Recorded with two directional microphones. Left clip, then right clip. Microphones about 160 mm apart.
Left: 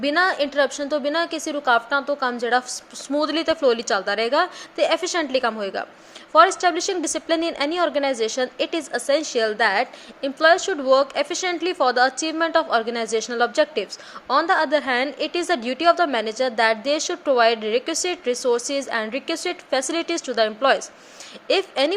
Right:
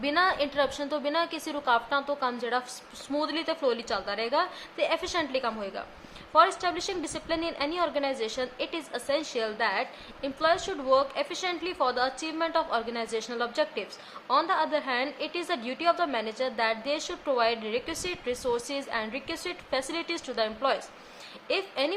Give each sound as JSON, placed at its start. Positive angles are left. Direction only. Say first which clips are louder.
{"t": 0.0, "sound": "a woman's voice", "louder": "left 6 dB", "side_deg": 30}